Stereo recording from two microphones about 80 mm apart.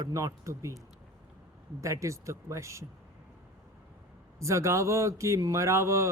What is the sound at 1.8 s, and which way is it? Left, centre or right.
Speech, right.